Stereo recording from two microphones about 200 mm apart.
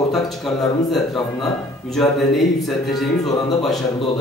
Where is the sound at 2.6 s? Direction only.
Centre (ahead or behind).